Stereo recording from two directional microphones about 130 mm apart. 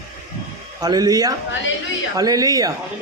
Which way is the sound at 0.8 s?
30° right (ahead or behind).